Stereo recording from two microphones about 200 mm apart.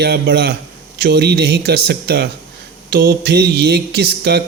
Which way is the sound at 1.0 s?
55° right (ahead or behind).